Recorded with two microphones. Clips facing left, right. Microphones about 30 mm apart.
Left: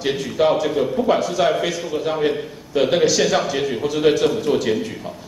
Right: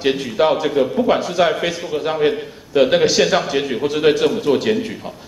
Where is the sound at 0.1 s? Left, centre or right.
Right.